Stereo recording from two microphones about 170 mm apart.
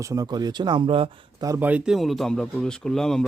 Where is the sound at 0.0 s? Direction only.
20° right (ahead or behind).